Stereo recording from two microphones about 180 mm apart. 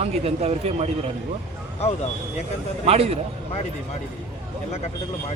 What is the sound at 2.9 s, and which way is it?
Speech, 35° right (ahead or behind).